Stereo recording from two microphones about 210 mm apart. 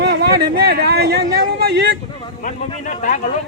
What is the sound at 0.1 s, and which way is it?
Speech, 50° right (ahead or behind).